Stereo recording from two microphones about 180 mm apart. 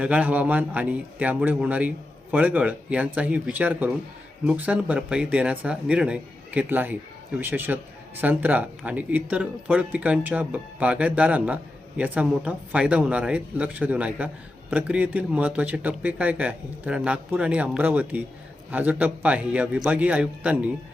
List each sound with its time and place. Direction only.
0.0 s speech: 5° right (ahead or behind)